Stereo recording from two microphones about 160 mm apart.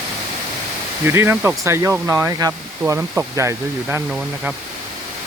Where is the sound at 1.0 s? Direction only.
15° right (ahead or behind).